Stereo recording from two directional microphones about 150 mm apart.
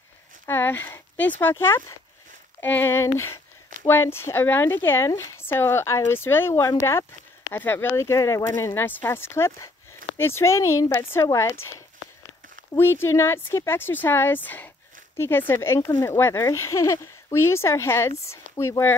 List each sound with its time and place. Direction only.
0.5 s speech: 15° left (ahead or behind)
12.7 s speech: 15° left (ahead or behind)